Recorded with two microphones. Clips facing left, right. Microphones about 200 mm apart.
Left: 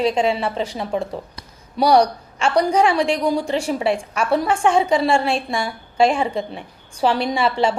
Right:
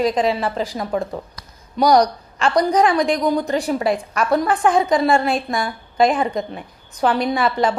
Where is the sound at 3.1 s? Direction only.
10° left (ahead or behind).